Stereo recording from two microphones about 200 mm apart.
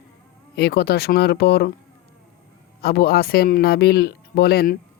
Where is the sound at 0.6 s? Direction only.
50° left (ahead or behind).